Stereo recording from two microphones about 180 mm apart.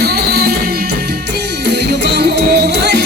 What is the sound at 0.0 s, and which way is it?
Music, 60° right (ahead or behind).